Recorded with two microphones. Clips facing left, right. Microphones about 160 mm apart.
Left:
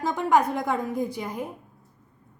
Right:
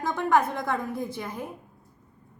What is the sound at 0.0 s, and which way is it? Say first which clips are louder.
A woman's voice: left 2 dB; 15° left (ahead or behind).